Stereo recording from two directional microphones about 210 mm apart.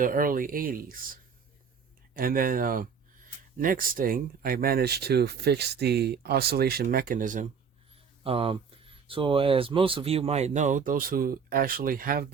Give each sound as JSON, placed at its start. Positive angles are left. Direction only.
{"t": 0.0, "sound": "speech", "side_deg": -40}
{"t": 8.2, "sound": "speech", "side_deg": -25}